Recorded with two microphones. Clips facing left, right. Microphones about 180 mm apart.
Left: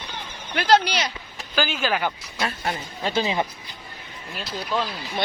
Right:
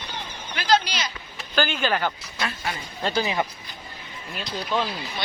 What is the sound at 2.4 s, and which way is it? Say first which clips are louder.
Speech: left 3 dB; 40° left (ahead or behind).